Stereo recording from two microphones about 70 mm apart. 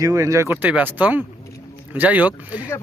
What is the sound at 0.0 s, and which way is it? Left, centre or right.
Speech, right.